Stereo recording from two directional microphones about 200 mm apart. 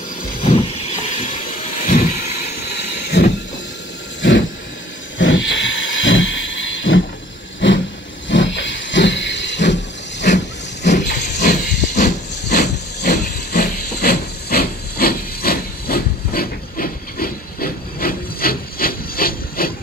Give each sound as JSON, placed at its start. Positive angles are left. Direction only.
{"t": 1.8, "sound": "vehicle", "side_deg": 40}
{"t": 2.7, "sound": "vehicle", "side_deg": 55}
{"t": 5.2, "sound": "a sound", "side_deg": 70}
{"t": 7.6, "sound": "vehicle", "side_deg": 65}
{"t": 8.3, "sound": "hiss", "side_deg": 65}
{"t": 10.3, "sound": "hiss", "side_deg": 35}
{"t": 12.4, "sound": "hiss", "side_deg": 55}